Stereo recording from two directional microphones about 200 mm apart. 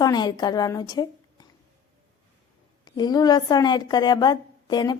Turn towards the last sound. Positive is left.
turn(degrees=20)  # may be behind; listen again after turning